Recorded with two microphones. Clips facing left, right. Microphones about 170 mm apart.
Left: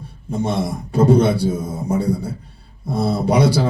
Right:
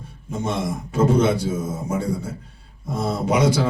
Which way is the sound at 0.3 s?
35° left (ahead or behind).